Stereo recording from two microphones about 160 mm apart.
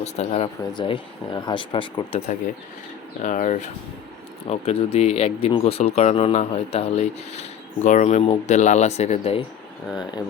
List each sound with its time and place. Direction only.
0.0 s speech: 40° left (ahead or behind)
3.2 s speech: 50° left (ahead or behind)
4.4 s speech: 40° left (ahead or behind)
9.9 s speech: 25° left (ahead or behind)